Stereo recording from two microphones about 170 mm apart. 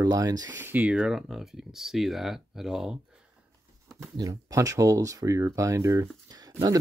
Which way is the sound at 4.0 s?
20° right (ahead or behind).